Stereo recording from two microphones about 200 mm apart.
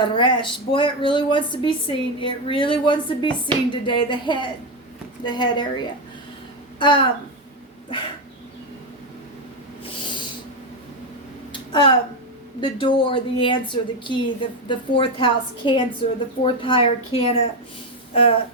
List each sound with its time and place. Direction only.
0.0 s speech: 25° left (ahead or behind)
11.5 s a sound: 25° left (ahead or behind)
12.5 s speech: 25° left (ahead or behind)